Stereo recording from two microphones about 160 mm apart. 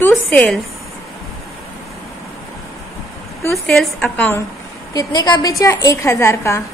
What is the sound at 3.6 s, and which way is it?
Speech, 5° left (ahead or behind).